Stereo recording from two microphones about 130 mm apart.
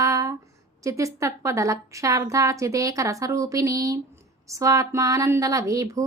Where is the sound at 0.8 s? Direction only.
25° right (ahead or behind).